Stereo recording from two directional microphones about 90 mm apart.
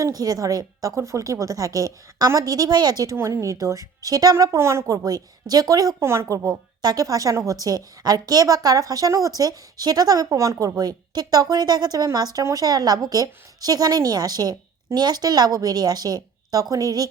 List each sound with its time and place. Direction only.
0.0 s speech: 45° right (ahead or behind)
3.2 s speech: 30° right (ahead or behind)
4.5 s speech: 30° right (ahead or behind)
6.0 s a woman's voice: 30° right (ahead or behind)